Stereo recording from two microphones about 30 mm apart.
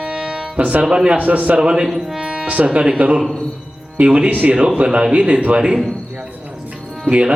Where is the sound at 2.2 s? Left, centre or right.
Right.